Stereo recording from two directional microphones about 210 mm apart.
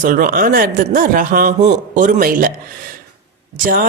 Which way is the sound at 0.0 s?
40° right (ahead or behind).